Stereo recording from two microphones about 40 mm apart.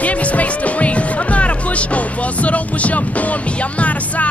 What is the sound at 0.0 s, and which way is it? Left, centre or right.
Speech, left.